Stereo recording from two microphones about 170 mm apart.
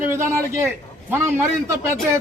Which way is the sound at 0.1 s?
15° right (ahead or behind).